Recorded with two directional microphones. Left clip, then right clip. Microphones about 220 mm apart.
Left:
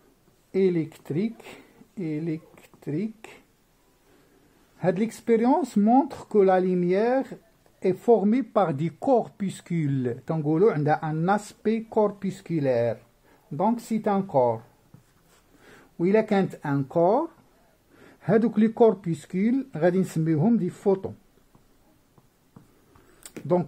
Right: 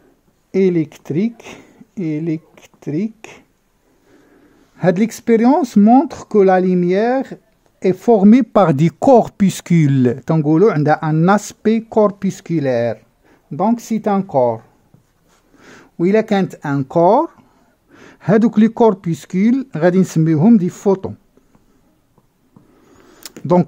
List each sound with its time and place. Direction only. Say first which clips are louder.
0.5 s speech: right 8 dB; 40° right (ahead or behind)
4.7 s speech: right 10 dB; 45° right (ahead or behind)
15.6 s speech: right 9 dB; 45° right (ahead or behind)
23.2 s camera: right 6 dB; 40° right (ahead or behind)